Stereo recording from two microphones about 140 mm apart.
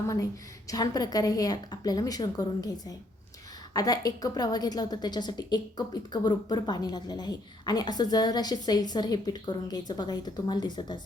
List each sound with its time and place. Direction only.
0.7 s a woman's voice: 30° left (ahead or behind)